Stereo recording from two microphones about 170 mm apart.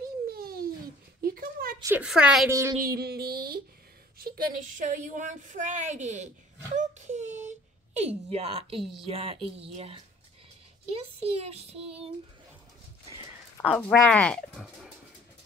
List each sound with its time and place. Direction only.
0.0 s babbling: 60° right (ahead or behind)
1.2 s a sound: 60° right (ahead or behind)
2.0 s speech: 5° right (ahead or behind)
2.8 s a sound: 65° right (ahead or behind)
4.2 s a woman's voice: 55° right (ahead or behind); by 12.1 s 35° right (ahead or behind)
13.7 s speech: 5° left (ahead or behind)